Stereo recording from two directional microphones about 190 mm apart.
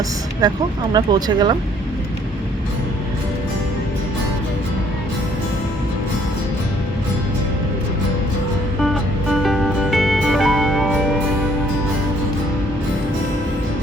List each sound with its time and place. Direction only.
0.4 s speech: 20° right (ahead or behind)
9.3 s music: centre (ahead or behind)